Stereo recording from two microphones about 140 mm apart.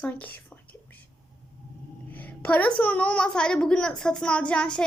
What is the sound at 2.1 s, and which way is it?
A woman's voice, 10° left (ahead or behind).